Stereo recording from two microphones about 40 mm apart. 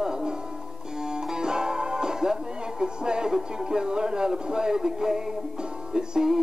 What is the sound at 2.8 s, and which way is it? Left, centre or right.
Speech, centre.